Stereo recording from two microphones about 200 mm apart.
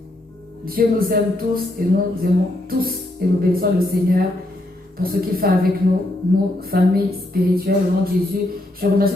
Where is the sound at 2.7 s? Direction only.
50° right (ahead or behind).